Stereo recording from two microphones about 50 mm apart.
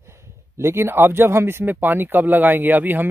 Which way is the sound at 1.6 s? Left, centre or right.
Right.